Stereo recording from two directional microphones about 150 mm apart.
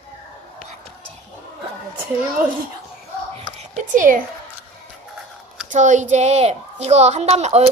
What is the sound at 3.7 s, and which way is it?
Speech, 60° right (ahead or behind).